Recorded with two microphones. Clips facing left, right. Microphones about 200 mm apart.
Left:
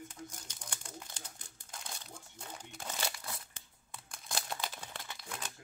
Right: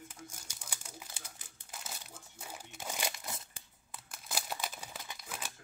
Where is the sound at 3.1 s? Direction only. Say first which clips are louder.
Right 1 dB; 20° right (ahead or behind).